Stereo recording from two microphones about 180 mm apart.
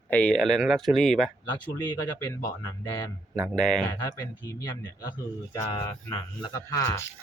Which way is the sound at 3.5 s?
5° left (ahead or behind).